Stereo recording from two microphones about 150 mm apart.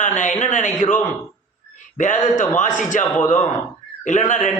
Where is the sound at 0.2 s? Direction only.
50° left (ahead or behind).